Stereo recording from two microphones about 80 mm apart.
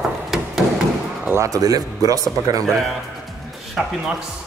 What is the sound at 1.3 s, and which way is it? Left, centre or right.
Speech, right.